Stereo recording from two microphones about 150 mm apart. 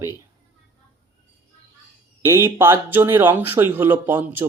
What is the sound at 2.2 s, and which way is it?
Speech, 15° right (ahead or behind).